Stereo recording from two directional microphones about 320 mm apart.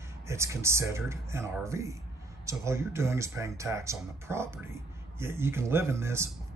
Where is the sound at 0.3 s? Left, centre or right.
Centre.